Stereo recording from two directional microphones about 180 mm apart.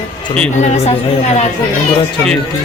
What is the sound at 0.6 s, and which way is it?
Speech, 35° left (ahead or behind).